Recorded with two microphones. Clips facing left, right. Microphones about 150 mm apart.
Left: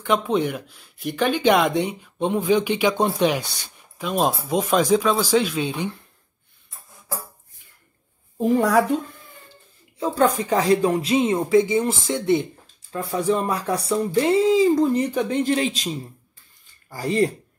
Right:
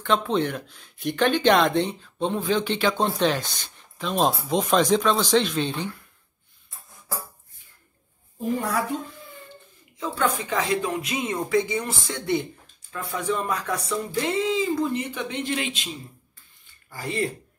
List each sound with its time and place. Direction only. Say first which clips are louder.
0.0 s speech: left 2 dB; 10° left (ahead or behind)
8.4 s a woman's voice: left 8 dB; 85° left
9.9 s speech: left 6 dB; 35° left (ahead or behind)
12.9 s speech: left 5 dB; 35° left (ahead or behind)